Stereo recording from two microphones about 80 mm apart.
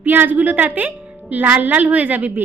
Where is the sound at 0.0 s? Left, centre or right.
Right.